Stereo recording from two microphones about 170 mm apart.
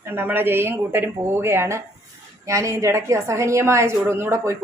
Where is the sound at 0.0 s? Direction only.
10° right (ahead or behind).